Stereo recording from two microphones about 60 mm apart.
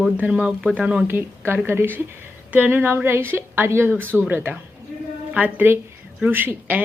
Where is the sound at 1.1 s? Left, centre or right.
Right.